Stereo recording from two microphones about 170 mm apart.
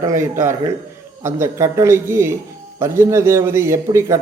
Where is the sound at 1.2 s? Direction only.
15° right (ahead or behind).